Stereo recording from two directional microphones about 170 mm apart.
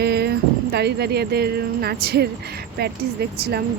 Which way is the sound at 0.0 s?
75° right (ahead or behind).